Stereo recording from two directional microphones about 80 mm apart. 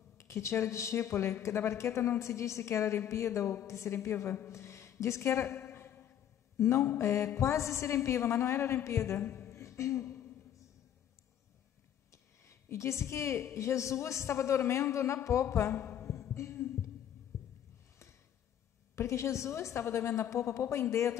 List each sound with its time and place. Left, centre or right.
0.2 s a woman's voice: left
12.1 s a woman's voice: left
16.3 s heart sounds: left
18.9 s a woman's voice: left